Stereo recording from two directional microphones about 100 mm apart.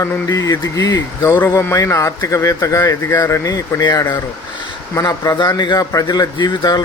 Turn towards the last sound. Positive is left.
turn(degrees=45)  # may be behind; listen again after turning